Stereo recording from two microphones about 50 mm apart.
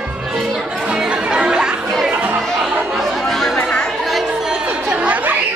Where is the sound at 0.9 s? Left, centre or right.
Centre.